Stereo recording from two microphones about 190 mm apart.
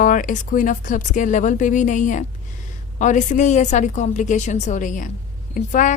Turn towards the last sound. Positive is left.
turn(degrees=45)  # may be behind; listen again after turning